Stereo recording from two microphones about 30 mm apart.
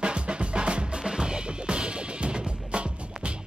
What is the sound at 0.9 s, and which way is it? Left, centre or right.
Music, right.